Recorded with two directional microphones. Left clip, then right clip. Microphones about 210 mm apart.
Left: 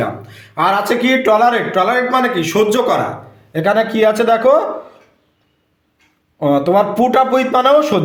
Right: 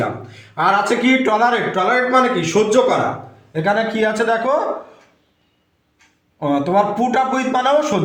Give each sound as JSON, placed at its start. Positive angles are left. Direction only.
{"t": 0.5, "sound": "a man's voice", "side_deg": 55}
{"t": 6.4, "sound": "a man's voice", "side_deg": 50}